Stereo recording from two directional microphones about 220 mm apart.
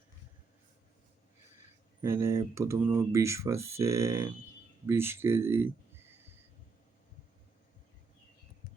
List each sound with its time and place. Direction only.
2.0 s speech: 10° right (ahead or behind)